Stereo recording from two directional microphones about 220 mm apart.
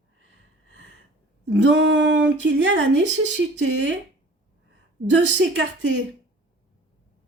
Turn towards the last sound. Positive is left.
turn(degrees=-55)  # may be behind; listen again after turning